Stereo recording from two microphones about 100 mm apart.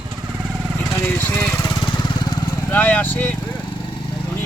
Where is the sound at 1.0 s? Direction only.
20° left (ahead or behind).